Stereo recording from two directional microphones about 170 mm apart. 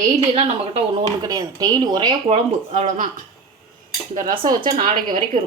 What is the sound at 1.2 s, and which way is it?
Speech, 20° right (ahead or behind).